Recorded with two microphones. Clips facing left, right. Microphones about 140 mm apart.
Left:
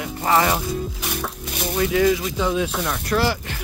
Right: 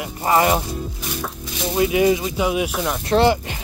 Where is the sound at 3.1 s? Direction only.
20° right (ahead or behind).